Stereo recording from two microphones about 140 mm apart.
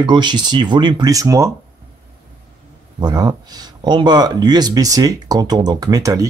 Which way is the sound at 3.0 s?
30° right (ahead or behind).